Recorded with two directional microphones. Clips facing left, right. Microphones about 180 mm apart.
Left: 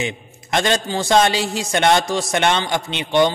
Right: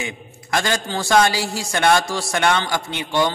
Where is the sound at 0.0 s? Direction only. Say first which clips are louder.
Left 4 dB; 20° left (ahead or behind).